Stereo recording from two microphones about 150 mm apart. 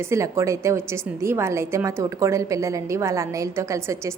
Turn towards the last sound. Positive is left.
turn(degrees=-20)  # may be behind; listen again after turning